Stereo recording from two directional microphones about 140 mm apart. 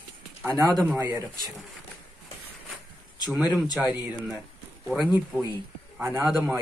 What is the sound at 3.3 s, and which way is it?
Speech, 10° right (ahead or behind).